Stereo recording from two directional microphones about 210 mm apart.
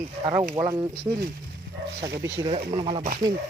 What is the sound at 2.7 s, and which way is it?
Speech, 20° right (ahead or behind).